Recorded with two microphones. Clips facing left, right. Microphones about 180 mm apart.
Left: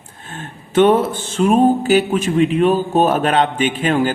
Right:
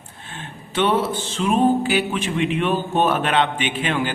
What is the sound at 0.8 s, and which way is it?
Speech, 50° left (ahead or behind).